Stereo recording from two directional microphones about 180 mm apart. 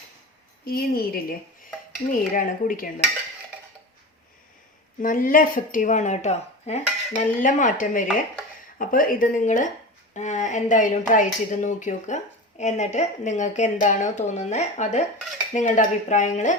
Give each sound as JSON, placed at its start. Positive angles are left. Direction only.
{"t": 0.6, "sound": "a woman's voice", "side_deg": 55}
{"t": 4.9, "sound": "a woman's voice", "side_deg": 50}